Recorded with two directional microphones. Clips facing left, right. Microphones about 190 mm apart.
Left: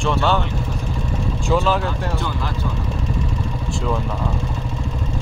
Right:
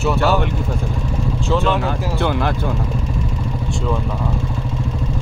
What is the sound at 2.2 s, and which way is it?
Speech, 65° right (ahead or behind).